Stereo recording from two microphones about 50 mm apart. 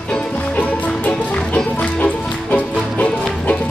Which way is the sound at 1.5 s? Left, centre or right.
Left.